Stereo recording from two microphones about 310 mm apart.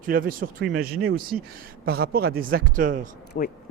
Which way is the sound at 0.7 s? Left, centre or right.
Right.